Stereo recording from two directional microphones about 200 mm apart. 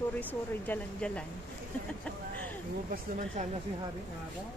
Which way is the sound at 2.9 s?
40° right (ahead or behind).